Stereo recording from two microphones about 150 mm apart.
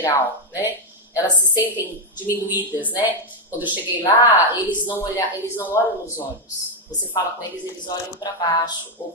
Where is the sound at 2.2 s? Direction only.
10° right (ahead or behind).